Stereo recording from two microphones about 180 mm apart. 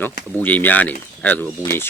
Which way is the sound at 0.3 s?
10° left (ahead or behind).